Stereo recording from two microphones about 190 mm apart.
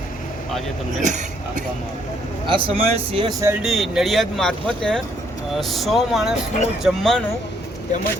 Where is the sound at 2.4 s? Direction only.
30° right (ahead or behind).